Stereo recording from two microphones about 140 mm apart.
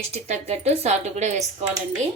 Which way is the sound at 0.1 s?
50° right (ahead or behind).